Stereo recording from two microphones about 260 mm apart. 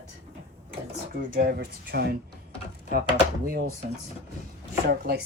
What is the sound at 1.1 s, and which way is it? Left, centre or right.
Speech, right.